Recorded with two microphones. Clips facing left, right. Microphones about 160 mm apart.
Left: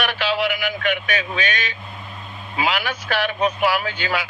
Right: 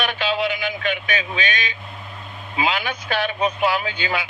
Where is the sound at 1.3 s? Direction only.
45° left (ahead or behind).